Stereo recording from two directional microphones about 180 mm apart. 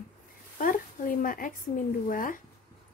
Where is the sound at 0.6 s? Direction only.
50° left (ahead or behind).